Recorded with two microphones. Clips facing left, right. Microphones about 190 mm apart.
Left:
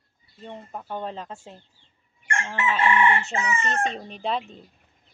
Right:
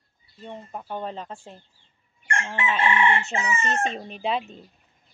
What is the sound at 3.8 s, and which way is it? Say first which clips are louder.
Speech: right 1 dB; 5° right (ahead or behind).